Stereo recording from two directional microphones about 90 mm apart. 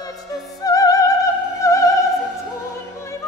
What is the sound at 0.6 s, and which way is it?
Opera, 40° left (ahead or behind).